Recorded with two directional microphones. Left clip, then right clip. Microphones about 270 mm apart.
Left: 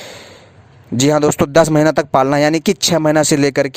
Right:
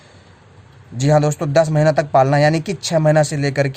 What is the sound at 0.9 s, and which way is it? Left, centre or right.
Speech, left.